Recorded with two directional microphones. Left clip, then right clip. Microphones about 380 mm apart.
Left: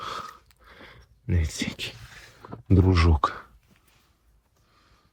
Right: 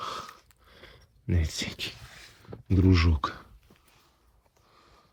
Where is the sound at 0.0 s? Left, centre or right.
Centre.